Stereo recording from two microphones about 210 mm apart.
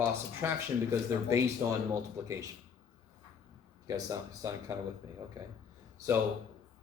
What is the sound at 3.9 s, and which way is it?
Speech, 15° right (ahead or behind).